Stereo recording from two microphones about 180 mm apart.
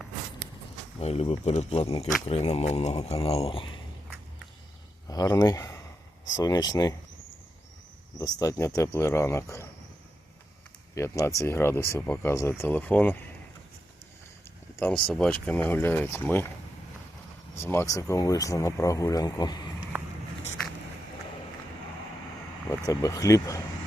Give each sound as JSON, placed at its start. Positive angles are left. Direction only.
{"t": 0.9, "sound": "speech", "side_deg": 35}
{"t": 5.0, "sound": "speech", "side_deg": 20}
{"t": 8.2, "sound": "speech", "side_deg": 20}
{"t": 10.9, "sound": "speech", "side_deg": 15}
{"t": 14.8, "sound": "speech", "side_deg": 5}
{"t": 17.6, "sound": "speech", "side_deg": 15}
{"t": 22.7, "sound": "speech", "side_deg": 20}